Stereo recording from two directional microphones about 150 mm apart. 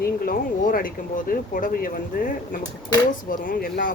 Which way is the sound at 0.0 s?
75° left (ahead or behind).